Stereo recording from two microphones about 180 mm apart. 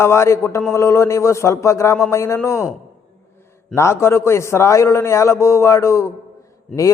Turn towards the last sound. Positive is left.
turn(degrees=15)  # may be behind; listen again after turning